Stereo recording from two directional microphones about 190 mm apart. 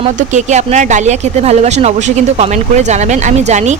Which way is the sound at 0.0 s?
40° right (ahead or behind).